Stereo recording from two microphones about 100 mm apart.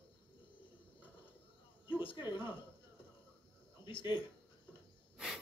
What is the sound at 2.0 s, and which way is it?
Speech, 55° left (ahead or behind).